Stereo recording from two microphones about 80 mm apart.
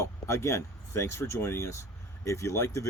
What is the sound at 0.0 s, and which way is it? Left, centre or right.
Speech, left.